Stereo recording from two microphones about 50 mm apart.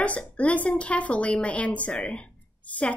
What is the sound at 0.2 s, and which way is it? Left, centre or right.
A woman's voice, left.